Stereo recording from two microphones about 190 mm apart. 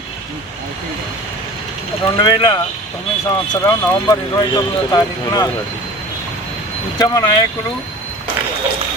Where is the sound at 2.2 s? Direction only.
20° left (ahead or behind).